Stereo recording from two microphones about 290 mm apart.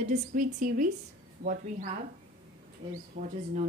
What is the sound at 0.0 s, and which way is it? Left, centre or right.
A woman's voice, right.